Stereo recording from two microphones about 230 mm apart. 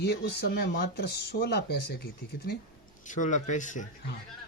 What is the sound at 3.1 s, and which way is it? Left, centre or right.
Speech, left.